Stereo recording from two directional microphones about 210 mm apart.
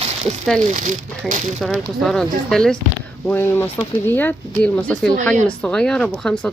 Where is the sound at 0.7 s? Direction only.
35° right (ahead or behind).